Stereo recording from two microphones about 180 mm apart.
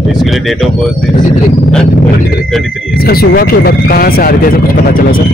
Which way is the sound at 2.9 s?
60° left (ahead or behind).